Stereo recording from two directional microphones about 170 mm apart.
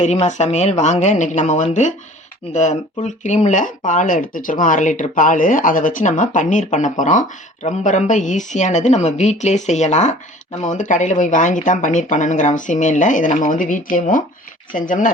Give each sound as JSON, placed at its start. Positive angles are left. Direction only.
{"t": 0.0, "sound": "speech", "side_deg": 40}